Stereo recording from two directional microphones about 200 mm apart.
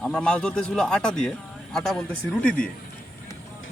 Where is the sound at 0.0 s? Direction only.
5° left (ahead or behind).